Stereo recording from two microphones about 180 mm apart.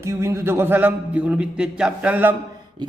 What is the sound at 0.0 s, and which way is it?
A man's voice, 15° right (ahead or behind).